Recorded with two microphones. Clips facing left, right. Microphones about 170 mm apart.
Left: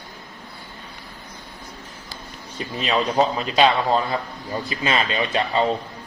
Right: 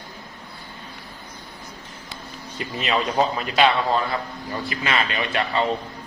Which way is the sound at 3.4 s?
25° left (ahead or behind).